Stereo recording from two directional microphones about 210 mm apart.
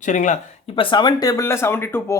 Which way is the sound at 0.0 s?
35° left (ahead or behind).